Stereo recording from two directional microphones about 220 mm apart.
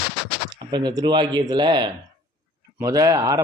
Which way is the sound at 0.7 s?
20° right (ahead or behind).